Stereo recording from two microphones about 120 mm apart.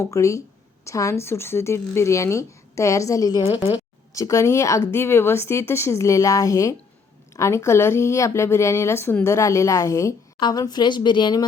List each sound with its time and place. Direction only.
0.0 s speech: 25° left (ahead or behind)
3.4 s speech: 50° left (ahead or behind)
4.1 s speech: 25° left (ahead or behind)